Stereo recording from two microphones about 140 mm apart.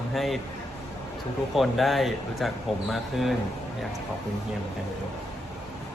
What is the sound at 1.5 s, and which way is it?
Speech, centre (ahead or behind).